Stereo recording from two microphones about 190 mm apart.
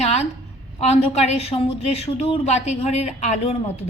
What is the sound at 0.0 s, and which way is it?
Speech, 35° left (ahead or behind).